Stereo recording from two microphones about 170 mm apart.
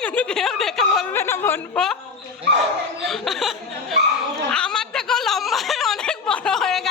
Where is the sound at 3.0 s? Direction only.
Centre (ahead or behind).